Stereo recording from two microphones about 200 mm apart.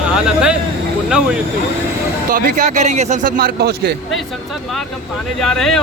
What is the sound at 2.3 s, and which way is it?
Speech, 40° right (ahead or behind).